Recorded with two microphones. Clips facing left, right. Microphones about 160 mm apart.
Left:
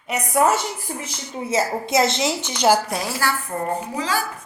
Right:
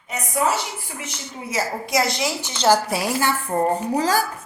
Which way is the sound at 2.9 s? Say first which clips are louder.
Right 3 dB; 10° right (ahead or behind).